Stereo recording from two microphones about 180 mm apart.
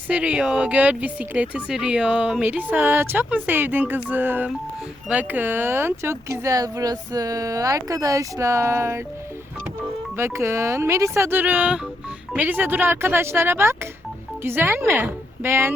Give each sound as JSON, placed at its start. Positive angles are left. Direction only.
{"t": 0.1, "sound": "speech", "side_deg": -5}
{"t": 10.2, "sound": "speech", "side_deg": -15}